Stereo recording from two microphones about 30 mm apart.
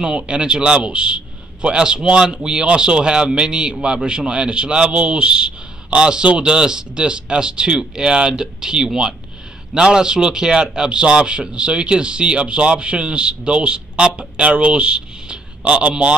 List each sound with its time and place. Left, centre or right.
0.0 s a man's voice: right